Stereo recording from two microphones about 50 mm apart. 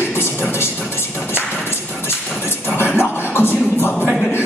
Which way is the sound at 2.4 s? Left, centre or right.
Left.